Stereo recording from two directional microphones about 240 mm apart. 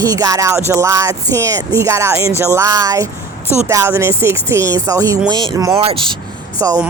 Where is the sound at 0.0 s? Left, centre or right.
Centre.